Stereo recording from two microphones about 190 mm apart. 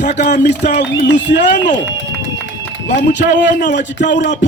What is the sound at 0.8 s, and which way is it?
Speech, 65° left (ahead or behind).